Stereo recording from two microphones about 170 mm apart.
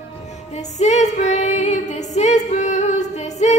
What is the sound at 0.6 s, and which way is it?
Female singing, 40° left (ahead or behind).